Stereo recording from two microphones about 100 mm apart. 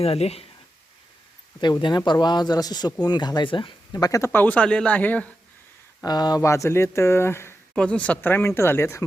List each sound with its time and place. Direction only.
0.0 s speech: 90° left
1.6 s a man's voice: 45° left (ahead or behind)
3.9 s speech: 40° left (ahead or behind)
4.2 s speech: 20° left (ahead or behind)
6.1 s a man's voice: 45° left (ahead or behind)
6.4 s speech: 30° left (ahead or behind)
7.8 s speech: 10° left (ahead or behind); by 9.0 s 25° left (ahead or behind)